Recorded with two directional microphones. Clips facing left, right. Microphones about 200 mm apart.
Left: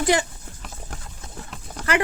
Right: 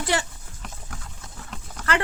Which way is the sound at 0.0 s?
15° left (ahead or behind).